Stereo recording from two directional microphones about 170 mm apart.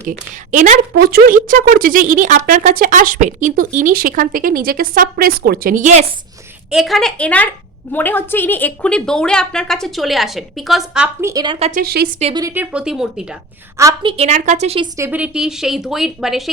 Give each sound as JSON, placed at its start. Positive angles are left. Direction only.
{"t": 0.1, "sound": "a woman's voice", "side_deg": -45}
{"t": 6.7, "sound": "a woman's voice", "side_deg": 0}
{"t": 11.2, "sound": "a woman's voice", "side_deg": -15}
{"t": 11.7, "sound": "speech", "side_deg": -65}
{"t": 12.2, "sound": "speech", "side_deg": -25}
{"t": 12.5, "sound": "a woman's voice", "side_deg": -5}
{"t": 14.0, "sound": "a woman's voice", "side_deg": -30}
{"t": 14.3, "sound": "a woman's voice", "side_deg": -45}
{"t": 14.9, "sound": "a woman's voice", "side_deg": -10}